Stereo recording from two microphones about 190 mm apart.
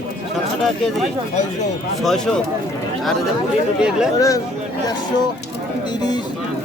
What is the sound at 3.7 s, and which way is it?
Speech, 5° right (ahead or behind).